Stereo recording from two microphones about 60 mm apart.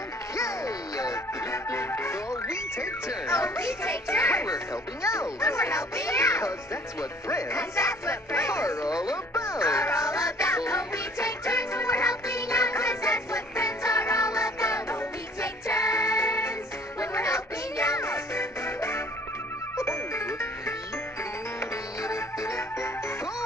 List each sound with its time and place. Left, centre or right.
0.4 s music: left
5.0 s speech: left
9.3 s music: left
22.0 s music: left